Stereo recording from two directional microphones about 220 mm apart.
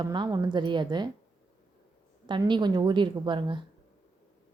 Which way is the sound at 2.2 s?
20° right (ahead or behind).